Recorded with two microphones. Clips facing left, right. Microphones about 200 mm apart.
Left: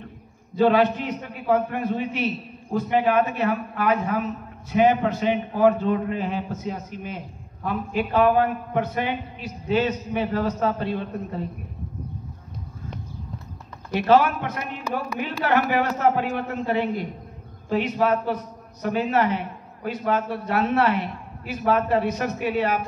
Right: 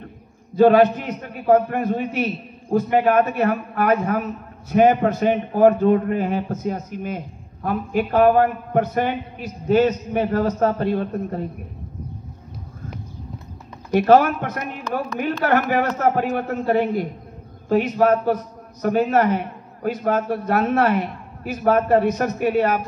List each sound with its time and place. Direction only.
0.6 s a man's voice: 45° right (ahead or behind)
13.9 s a man's voice: 45° right (ahead or behind)